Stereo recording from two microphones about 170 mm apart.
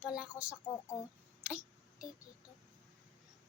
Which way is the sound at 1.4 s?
5° right (ahead or behind).